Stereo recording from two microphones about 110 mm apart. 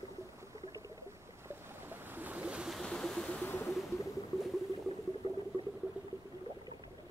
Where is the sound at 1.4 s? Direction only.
15° right (ahead or behind); by 3.5 s 5° left (ahead or behind).